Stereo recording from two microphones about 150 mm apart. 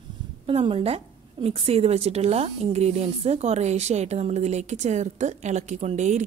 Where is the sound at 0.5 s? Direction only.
40° right (ahead or behind).